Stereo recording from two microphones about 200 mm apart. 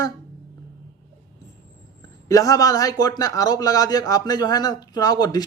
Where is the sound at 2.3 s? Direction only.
15° left (ahead or behind).